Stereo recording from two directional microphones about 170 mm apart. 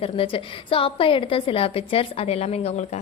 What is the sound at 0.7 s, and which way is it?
A woman's voice, 30° left (ahead or behind).